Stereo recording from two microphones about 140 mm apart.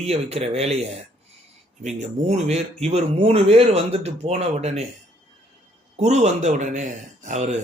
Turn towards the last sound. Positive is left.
turn(degrees=-55)  # may be behind; listen again after turning